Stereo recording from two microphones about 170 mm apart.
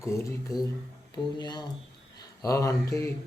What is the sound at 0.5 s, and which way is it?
Mantra, 20° left (ahead or behind).